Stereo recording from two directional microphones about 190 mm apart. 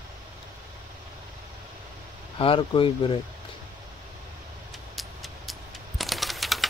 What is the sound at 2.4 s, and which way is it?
Speech, 30° left (ahead or behind).